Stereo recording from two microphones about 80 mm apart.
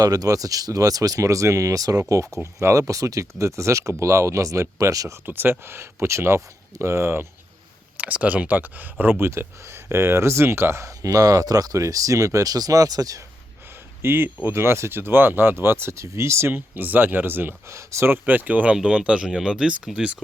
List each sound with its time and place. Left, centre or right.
0.0 s speech: right
5.2 s speech: right
7.9 s speech: centre; by 13.2 s right
14.0 s speech: right; by 20.2 s centre